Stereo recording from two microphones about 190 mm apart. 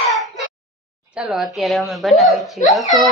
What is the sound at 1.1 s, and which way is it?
A woman's voice, 5° right (ahead or behind).